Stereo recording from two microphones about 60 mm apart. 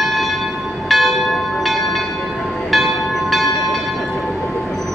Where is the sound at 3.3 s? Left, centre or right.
Centre.